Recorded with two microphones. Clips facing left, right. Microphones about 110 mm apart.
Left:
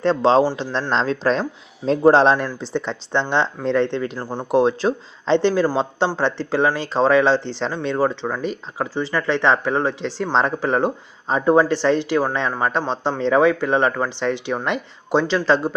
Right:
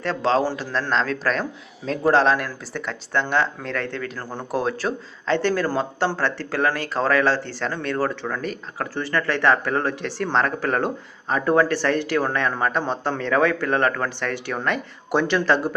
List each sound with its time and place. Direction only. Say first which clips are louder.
0.0 s speech: left 5 dB; 30° left (ahead or behind)